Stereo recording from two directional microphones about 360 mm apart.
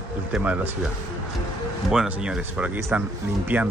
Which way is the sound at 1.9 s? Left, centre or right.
Centre.